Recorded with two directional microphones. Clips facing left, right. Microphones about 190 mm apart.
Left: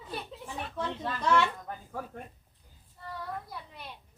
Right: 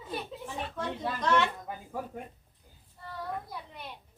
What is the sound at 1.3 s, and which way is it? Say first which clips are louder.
Speech: left 1 dB; 10° right (ahead or behind).